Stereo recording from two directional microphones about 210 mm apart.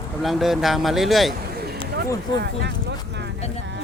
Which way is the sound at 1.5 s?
50° right (ahead or behind).